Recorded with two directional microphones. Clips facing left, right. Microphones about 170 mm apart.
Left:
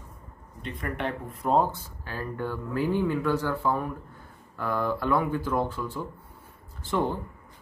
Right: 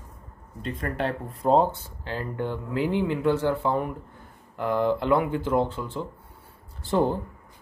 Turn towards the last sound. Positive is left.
turn(degrees=-35)  # may be behind; listen again after turning